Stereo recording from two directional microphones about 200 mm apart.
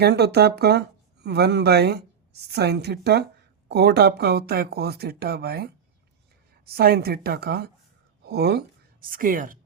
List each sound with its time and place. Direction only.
0.0 s a woman's voice: 55° right (ahead or behind)